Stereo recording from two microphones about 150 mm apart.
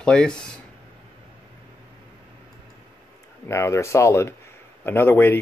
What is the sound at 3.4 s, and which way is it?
Speech, 20° left (ahead or behind).